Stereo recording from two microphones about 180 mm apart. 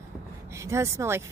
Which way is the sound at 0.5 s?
15° right (ahead or behind).